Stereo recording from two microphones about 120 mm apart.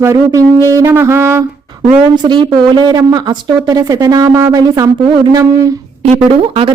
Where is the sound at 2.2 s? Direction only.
40° right (ahead or behind).